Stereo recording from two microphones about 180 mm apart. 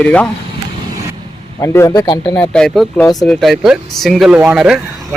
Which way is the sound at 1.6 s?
15° left (ahead or behind).